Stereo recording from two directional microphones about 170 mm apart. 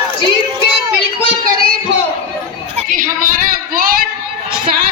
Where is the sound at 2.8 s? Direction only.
50° right (ahead or behind).